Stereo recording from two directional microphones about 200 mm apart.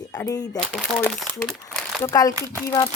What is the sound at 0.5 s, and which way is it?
A woman's voice, 5° left (ahead or behind).